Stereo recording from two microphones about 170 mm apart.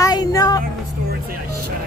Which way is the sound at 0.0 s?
20° left (ahead or behind).